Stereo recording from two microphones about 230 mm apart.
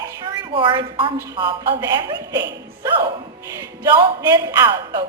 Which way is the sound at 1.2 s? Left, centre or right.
Centre.